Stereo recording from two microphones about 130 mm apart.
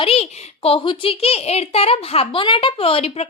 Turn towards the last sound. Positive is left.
turn(degrees=50)  # may be behind; listen again after turning